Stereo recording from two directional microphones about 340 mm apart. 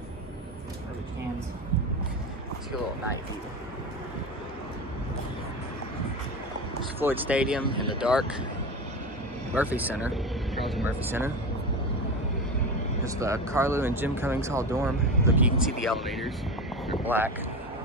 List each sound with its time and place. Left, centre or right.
7.0 s speech: centre
7.7 s speech: centre
8.0 s speech: centre
9.6 s speech: centre
13.0 s speech: centre